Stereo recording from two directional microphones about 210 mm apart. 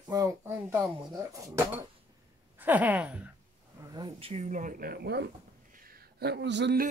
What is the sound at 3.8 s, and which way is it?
Speech, 20° right (ahead or behind).